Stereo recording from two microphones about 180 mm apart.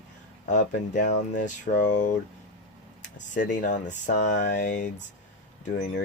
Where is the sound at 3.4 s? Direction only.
45° left (ahead or behind).